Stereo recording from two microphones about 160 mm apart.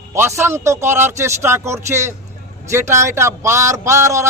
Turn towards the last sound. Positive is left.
turn(degrees=-20)  # may be behind; listen again after turning